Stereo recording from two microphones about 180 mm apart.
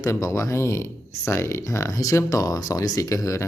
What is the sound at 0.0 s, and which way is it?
Speech, 15° left (ahead or behind).